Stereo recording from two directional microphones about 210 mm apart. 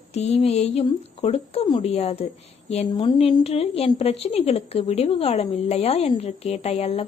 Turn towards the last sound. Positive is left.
turn(degrees=30)  # may be behind; listen again after turning